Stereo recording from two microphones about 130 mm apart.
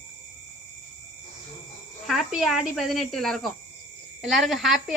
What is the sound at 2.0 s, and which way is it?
Speech, centre (ahead or behind).